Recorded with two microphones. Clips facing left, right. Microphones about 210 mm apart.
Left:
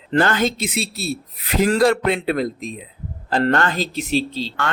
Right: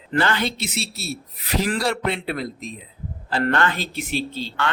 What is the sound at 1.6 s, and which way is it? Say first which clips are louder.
A man's voice: left 9 dB; 50° left (ahead or behind).